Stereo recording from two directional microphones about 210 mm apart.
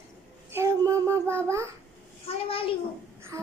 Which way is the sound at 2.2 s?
25° left (ahead or behind).